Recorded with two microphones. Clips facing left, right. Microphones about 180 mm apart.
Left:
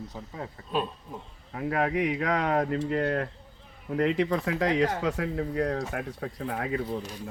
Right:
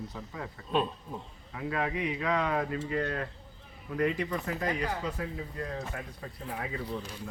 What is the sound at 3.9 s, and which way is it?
Speech, 70° left (ahead or behind).